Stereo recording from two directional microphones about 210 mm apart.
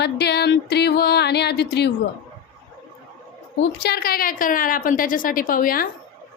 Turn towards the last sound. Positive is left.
turn(degrees=40)  # may be behind; listen again after turning